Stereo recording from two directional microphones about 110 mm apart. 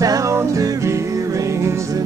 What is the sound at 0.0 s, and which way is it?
Music, 30° right (ahead or behind).